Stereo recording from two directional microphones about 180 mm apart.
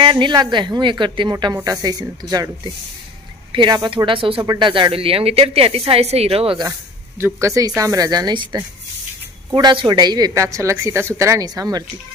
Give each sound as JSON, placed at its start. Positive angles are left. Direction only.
{"t": 0.0, "sound": "a woman's voice", "side_deg": -25}
{"t": 7.2, "sound": "speech", "side_deg": -15}